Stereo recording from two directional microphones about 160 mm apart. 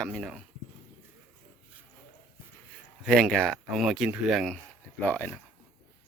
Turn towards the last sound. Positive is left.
turn(degrees=10)  # may be behind; listen again after turning